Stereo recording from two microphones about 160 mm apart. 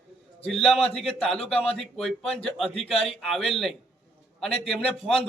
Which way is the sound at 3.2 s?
Centre (ahead or behind).